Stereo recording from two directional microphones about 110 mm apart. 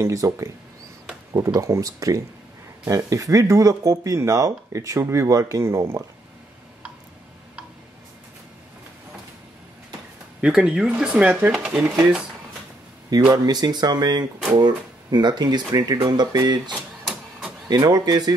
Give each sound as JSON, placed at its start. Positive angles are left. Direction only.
{"t": 0.0, "sound": "speech", "side_deg": -30}
{"t": 10.4, "sound": "speech", "side_deg": -10}
{"t": 13.3, "sound": "speech", "side_deg": -40}
{"t": 16.7, "sound": "a sound", "side_deg": 5}
{"t": 17.6, "sound": "speech", "side_deg": -40}